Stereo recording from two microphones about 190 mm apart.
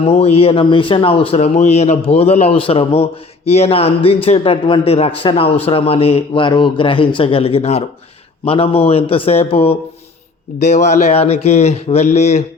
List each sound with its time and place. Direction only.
0.1 s a man's voice: 30° left (ahead or behind)